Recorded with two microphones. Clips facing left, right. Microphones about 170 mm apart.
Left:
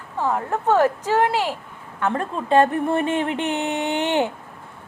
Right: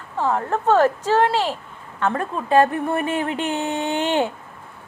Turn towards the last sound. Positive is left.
turn(degrees=20)  # may be behind; listen again after turning